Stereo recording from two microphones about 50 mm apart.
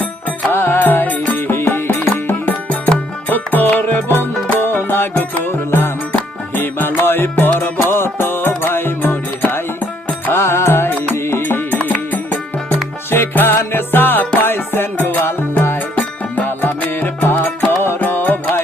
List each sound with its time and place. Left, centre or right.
0.0 s music: left
1.5 s music: left
2.5 s music: left
10.2 s music: left
11.9 s music: left
13.1 s music: left
14.9 s music: left
15.2 s music: left
16.0 s music: left
16.5 s music: left